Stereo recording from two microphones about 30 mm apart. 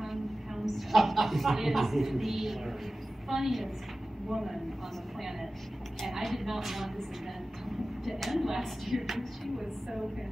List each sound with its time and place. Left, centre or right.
0.7 s a woman's voice: centre
6.0 s a woman's voice: centre
8.0 s a woman's voice: centre
9.6 s a woman's voice: centre